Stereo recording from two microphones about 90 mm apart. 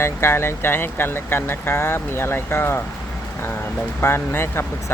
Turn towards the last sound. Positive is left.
turn(degrees=25)  # may be behind; listen again after turning